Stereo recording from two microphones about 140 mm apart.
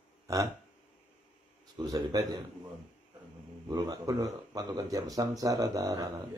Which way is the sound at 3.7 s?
25° right (ahead or behind).